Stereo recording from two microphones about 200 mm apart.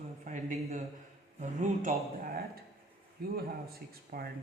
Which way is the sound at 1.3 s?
40° right (ahead or behind).